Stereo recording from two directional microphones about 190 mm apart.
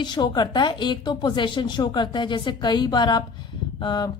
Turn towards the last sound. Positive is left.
turn(degrees=20)  # may be behind; listen again after turning